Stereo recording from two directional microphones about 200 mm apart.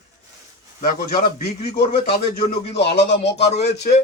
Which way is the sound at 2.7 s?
55° left (ahead or behind).